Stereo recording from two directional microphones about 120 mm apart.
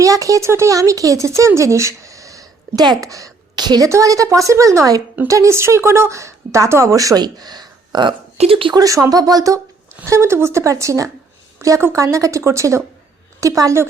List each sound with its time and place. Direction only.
0.0 s speech: 25° right (ahead or behind)
8.4 s speech: 50° right (ahead or behind)
8.7 s speech: 30° right (ahead or behind)